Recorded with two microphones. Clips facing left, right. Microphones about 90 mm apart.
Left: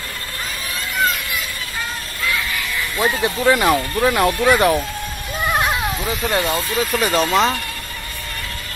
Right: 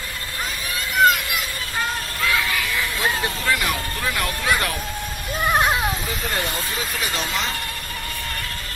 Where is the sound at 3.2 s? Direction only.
25° left (ahead or behind).